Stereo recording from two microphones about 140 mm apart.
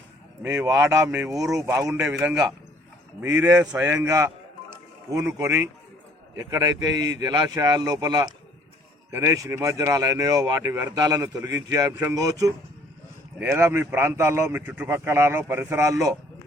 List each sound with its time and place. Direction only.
0.4 s speech: 20° right (ahead or behind)
3.2 s speech: 20° right (ahead or behind)